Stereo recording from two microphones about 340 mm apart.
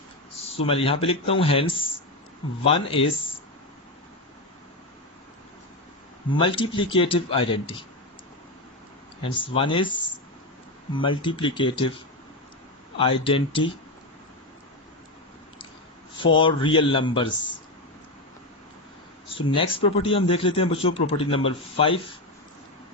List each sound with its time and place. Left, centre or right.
0.4 s speech: centre
6.2 s speech: centre
9.2 s speech: centre
13.0 s speech: centre
16.1 s speech: centre
19.4 s speech: centre